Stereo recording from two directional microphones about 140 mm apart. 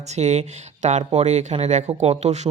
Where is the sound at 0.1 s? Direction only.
55° right (ahead or behind).